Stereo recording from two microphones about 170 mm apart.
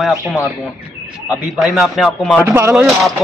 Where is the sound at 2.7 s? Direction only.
Centre (ahead or behind).